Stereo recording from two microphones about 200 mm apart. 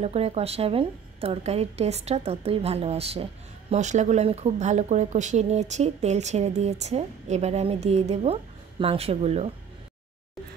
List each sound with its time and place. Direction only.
0.0 s speech: 30° right (ahead or behind)